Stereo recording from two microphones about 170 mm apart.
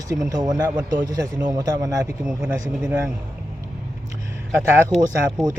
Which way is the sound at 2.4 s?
10° right (ahead or behind).